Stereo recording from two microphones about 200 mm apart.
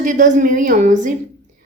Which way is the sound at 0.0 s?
40° right (ahead or behind).